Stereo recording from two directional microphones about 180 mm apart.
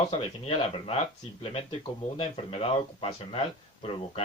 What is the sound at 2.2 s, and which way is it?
Speech, 35° left (ahead or behind).